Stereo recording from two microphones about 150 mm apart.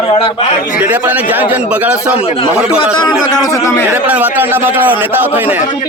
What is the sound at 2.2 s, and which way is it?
Speech, 40° left (ahead or behind).